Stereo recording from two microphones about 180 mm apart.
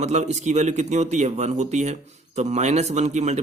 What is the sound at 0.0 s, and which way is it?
A man's voice, 40° right (ahead or behind).